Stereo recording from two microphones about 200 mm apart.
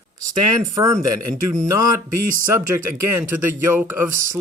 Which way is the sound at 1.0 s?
15° right (ahead or behind).